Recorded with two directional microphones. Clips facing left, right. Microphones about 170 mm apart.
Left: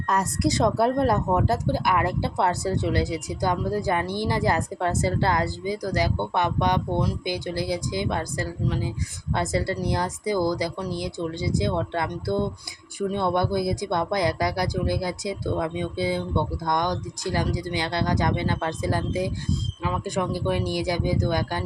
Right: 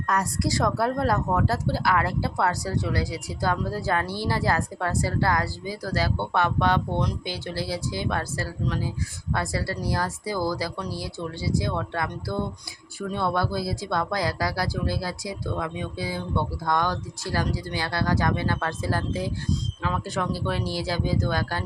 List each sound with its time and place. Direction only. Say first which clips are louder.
0.1 s a woman's voice: left 2 dB; 20° left (ahead or behind)